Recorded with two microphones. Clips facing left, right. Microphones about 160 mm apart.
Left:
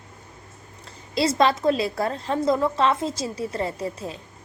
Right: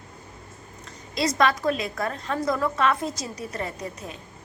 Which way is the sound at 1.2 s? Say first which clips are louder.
Left 2 dB; 30° left (ahead or behind).